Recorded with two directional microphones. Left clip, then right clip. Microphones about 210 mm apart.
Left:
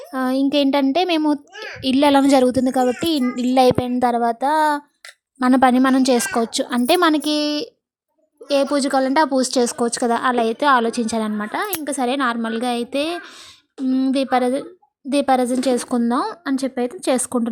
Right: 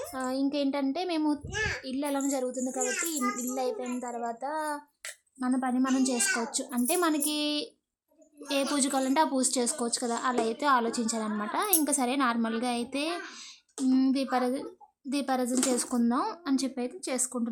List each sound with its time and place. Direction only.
0.1 s a child's voice: 35° left (ahead or behind)
5.9 s a child's voice: 35° left (ahead or behind); by 13.2 s 20° left (ahead or behind)
13.8 s a sound: 10° left (ahead or behind)
14.1 s speech: 25° left (ahead or behind)